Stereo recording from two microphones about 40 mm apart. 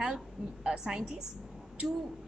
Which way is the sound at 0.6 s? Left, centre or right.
Centre.